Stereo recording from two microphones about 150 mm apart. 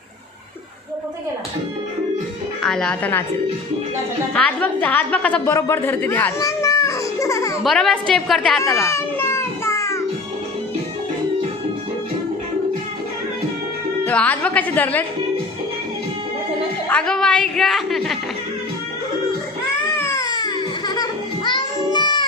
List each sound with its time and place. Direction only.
2.6 s a woman's voice: 5° left (ahead or behind)
4.4 s a woman's voice: 10° left (ahead or behind)
5.5 s a sound: 15° left (ahead or behind)
7.6 s a woman's voice: centre (ahead or behind)
8.6 s a sound: 20° left (ahead or behind)
14.0 s a woman's voice: 10° left (ahead or behind)
16.9 s a woman's voice: 5° left (ahead or behind)
20.0 s music: 20° left (ahead or behind)